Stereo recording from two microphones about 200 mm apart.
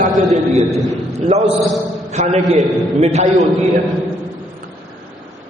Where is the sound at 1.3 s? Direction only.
30° right (ahead or behind).